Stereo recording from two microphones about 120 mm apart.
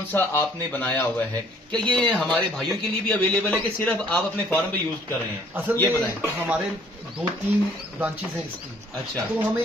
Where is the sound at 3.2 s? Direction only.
10° left (ahead or behind).